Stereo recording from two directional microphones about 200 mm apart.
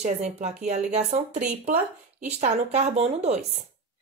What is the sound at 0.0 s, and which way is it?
Speech, 35° right (ahead or behind).